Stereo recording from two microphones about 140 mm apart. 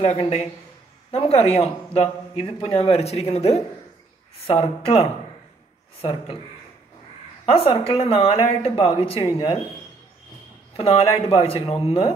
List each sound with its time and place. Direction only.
0.0 s a man's voice: 50° left (ahead or behind)
7.4 s a man's voice: 45° left (ahead or behind)
10.8 s speech: 40° left (ahead or behind)